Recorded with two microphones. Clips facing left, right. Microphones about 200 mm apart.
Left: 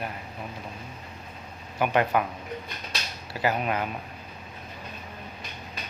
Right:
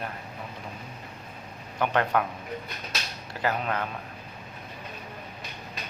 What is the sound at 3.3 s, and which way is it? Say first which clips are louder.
Speech: left 2 dB; 10° left (ahead or behind).